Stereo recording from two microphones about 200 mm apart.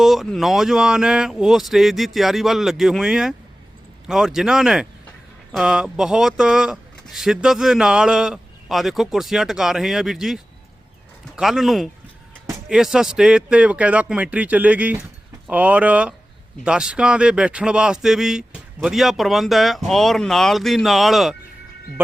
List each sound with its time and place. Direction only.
0.0 s speech: centre (ahead or behind)